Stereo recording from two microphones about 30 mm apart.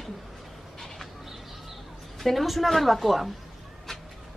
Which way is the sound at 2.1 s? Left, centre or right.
Centre.